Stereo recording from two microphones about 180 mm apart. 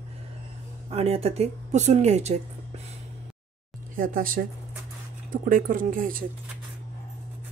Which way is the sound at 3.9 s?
50° right (ahead or behind).